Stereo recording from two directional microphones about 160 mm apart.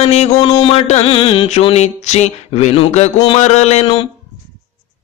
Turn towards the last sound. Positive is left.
turn(degrees=35)  # may be behind; listen again after turning